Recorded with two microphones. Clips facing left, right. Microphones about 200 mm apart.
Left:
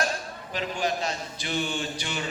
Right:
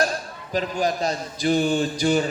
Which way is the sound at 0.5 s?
40° right (ahead or behind).